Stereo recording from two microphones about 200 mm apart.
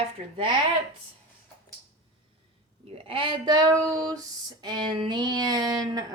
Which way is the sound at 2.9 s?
30° right (ahead or behind).